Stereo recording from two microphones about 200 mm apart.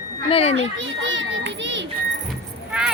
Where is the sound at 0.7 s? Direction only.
70° right (ahead or behind).